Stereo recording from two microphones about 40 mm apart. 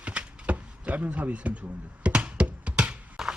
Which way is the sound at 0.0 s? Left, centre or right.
Right.